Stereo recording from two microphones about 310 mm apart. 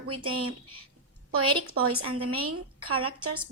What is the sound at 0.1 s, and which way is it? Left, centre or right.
Speech, right.